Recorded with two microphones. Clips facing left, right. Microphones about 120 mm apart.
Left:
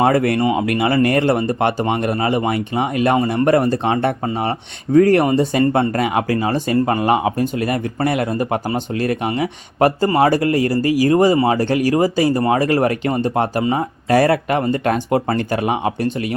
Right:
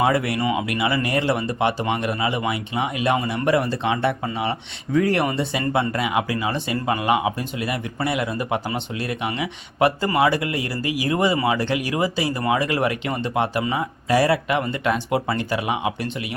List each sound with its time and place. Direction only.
0.0 s speech: 50° left (ahead or behind)